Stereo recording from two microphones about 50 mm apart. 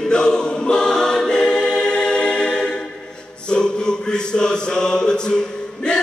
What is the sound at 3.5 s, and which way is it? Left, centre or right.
Chant, centre.